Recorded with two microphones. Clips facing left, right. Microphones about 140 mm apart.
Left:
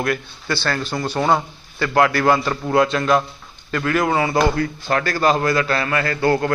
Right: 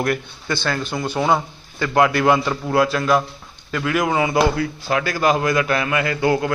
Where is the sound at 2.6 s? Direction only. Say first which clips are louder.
Left 1 dB; 5° right (ahead or behind).